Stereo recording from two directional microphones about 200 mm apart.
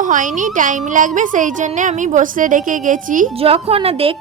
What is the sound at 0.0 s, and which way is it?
A woman's voice, 40° right (ahead or behind).